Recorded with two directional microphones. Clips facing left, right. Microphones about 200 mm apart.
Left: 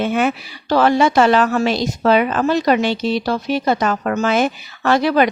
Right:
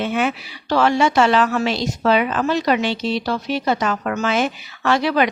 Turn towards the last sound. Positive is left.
turn(degrees=40)  # may be behind; listen again after turning